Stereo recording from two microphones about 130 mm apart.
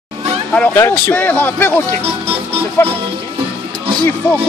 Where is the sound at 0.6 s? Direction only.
20° left (ahead or behind).